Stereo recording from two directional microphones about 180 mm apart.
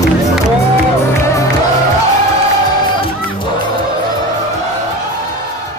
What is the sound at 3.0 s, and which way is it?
Music, 30° left (ahead or behind).